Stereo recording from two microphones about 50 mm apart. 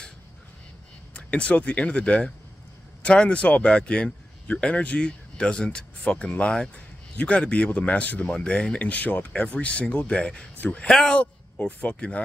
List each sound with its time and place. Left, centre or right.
1.1 s a man's voice: left
10.9 s speech: centre
11.1 s speech: left